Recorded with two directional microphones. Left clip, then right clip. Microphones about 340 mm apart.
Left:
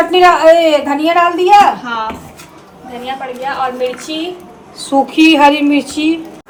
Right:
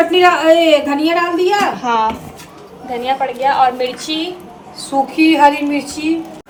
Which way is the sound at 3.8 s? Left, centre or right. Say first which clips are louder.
Left 2 dB; centre.